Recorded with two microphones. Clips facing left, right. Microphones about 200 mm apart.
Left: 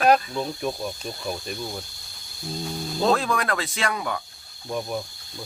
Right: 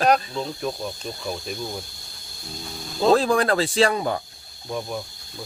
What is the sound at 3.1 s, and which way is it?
Speech, 30° right (ahead or behind).